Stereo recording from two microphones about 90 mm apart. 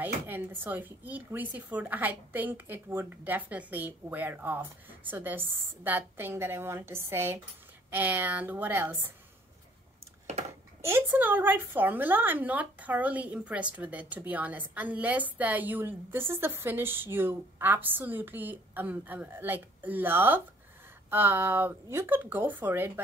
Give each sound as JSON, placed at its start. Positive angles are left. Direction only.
{"t": 0.0, "sound": "a woman's voice", "side_deg": -20}
{"t": 10.8, "sound": "a woman's voice", "side_deg": -30}